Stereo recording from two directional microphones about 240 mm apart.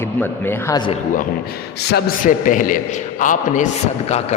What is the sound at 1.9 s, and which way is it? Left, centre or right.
A man's voice, left.